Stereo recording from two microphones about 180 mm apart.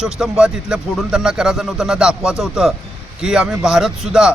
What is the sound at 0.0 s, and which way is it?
A man's voice, 5° right (ahead or behind).